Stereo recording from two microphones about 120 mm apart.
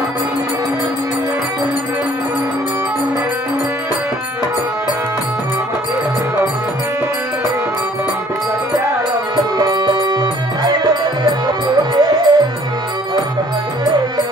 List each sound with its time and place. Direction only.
9.6 s music: 35° right (ahead or behind)